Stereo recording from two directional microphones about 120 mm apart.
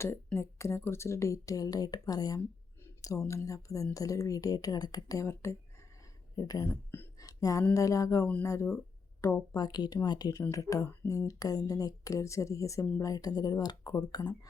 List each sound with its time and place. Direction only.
0.3 s speech: 20° left (ahead or behind)
9.6 s speech: 35° left (ahead or behind)